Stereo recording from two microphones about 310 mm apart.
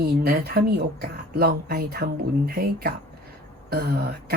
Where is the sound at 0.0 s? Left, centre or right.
Right.